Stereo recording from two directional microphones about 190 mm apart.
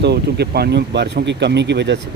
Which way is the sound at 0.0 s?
60° right (ahead or behind).